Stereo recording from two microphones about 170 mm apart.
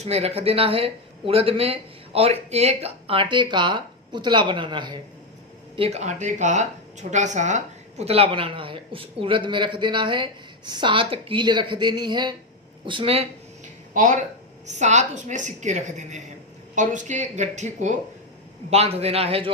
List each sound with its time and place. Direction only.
0.0 s a woman's voice: 35° right (ahead or behind)
13.9 s a woman's voice: 50° right (ahead or behind); by 19.5 s 35° right (ahead or behind)